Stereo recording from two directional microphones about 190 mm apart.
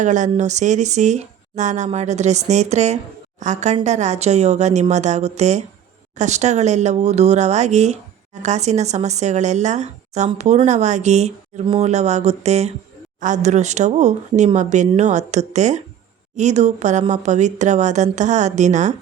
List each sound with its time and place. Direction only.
0.0 s speech: 40° right (ahead or behind)